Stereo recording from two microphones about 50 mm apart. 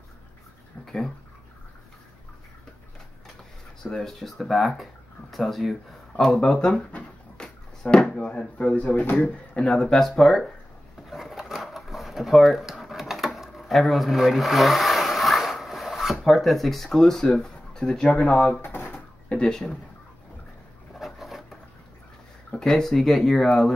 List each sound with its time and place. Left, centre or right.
0.8 s speech: centre
3.8 s speech: centre
6.7 s speech: left
7.3 s a sound: centre
8.2 s speech: left
9.5 s speech: left
9.8 s speech: centre
11.1 s a sound: centre; by 18.6 s left
18.6 s drawer open or close: left
18.9 s a sound: left
21.0 s a sound: centre
22.5 s speech: centre